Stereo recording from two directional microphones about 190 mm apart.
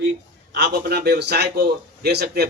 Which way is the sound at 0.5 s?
60° right (ahead or behind).